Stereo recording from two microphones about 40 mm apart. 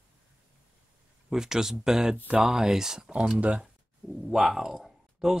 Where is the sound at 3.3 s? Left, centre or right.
Right.